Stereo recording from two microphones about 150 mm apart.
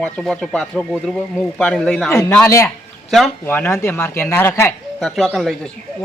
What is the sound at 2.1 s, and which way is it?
Speech, 20° left (ahead or behind).